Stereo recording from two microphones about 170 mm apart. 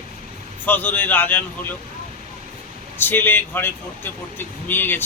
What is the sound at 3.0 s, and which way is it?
Speech, 10° left (ahead or behind).